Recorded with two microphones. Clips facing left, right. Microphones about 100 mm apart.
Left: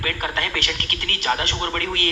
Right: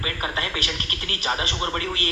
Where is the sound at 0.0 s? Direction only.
20° right (ahead or behind).